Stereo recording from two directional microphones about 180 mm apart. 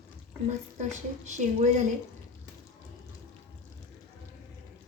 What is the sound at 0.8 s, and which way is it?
Speech, 40° right (ahead or behind).